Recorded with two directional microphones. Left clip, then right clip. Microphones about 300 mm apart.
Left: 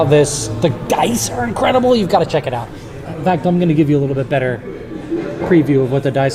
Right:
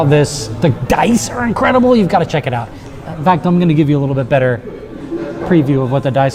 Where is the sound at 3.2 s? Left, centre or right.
Centre.